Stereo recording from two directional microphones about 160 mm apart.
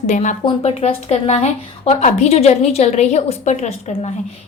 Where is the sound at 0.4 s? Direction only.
40° left (ahead or behind).